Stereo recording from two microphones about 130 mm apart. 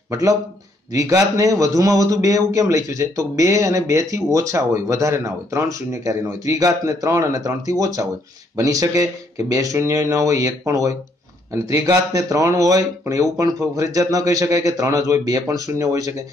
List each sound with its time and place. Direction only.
0.1 s a man's voice: 25° right (ahead or behind)